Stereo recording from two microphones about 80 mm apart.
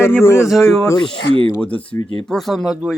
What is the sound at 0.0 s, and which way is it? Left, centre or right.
Speech, left.